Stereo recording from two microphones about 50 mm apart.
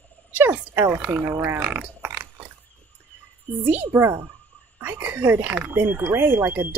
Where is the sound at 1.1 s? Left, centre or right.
Right.